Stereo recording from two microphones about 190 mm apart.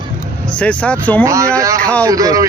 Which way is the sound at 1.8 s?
5° left (ahead or behind).